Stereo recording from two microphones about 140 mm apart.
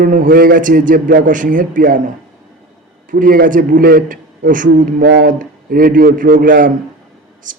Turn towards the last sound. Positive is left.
turn(degrees=-70)  # may be behind; listen again after turning